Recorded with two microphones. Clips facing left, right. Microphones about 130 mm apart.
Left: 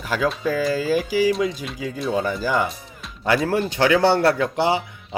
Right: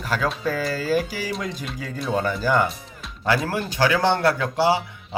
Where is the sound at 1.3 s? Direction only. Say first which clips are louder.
Left 7 dB; 5° left (ahead or behind).